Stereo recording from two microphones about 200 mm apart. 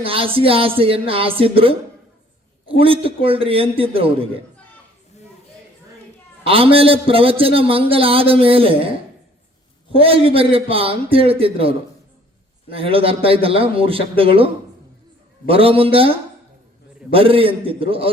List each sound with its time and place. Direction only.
0.0 s a man's voice: 25° right (ahead or behind)
6.4 s a man's voice: 30° right (ahead or behind)
9.9 s a man's voice: 30° right (ahead or behind)
12.7 s a man's voice: 30° right (ahead or behind)